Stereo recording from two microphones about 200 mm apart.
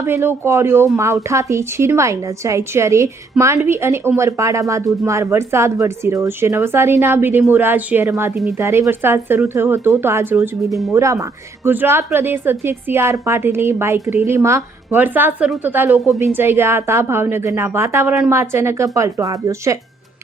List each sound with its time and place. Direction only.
0.0 s a woman's voice: 10° right (ahead or behind)